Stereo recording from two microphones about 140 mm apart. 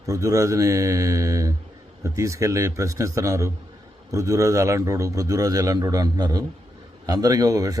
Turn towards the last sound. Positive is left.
turn(degrees=-25)  # may be behind; listen again after turning